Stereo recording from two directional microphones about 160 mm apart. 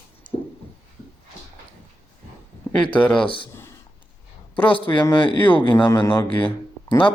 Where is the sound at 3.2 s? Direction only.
30° left (ahead or behind).